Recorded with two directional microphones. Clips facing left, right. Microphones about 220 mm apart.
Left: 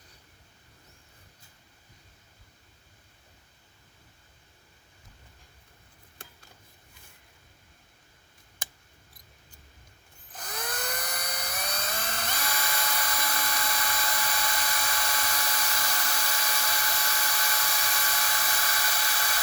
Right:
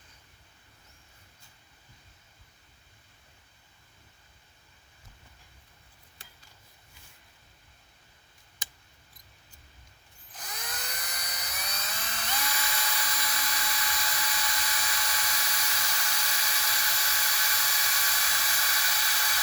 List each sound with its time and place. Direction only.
8.6 s mouse: 55° left (ahead or behind)
10.4 s dental drill: 55° left (ahead or behind)